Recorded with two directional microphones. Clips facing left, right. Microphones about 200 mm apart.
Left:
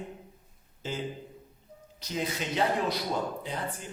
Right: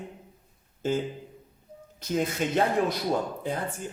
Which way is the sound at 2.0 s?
50° right (ahead or behind).